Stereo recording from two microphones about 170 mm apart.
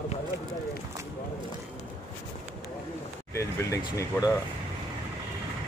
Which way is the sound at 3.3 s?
20° left (ahead or behind).